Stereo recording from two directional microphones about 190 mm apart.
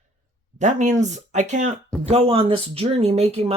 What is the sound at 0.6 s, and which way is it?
A woman's voice, 40° right (ahead or behind).